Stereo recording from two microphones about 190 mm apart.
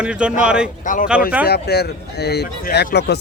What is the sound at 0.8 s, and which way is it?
Speech, 45° left (ahead or behind).